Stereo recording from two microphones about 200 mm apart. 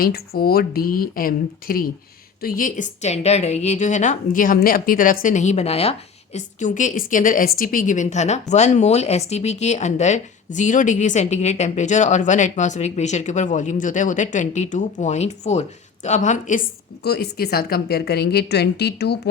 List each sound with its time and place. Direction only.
0.0 s a woman's voice: 50° left (ahead or behind)
17.0 s speech: 55° left (ahead or behind)